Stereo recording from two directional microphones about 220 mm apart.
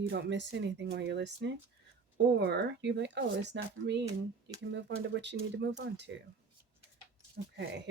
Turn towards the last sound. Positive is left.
turn(degrees=-50)  # may be behind; listen again after turning